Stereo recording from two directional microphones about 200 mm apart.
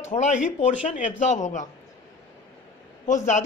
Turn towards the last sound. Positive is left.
turn(degrees=35)  # may be behind; listen again after turning